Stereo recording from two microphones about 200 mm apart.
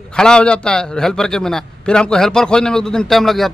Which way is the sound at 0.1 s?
5° left (ahead or behind).